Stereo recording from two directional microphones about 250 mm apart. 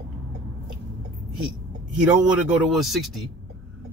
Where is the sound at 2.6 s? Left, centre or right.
Centre.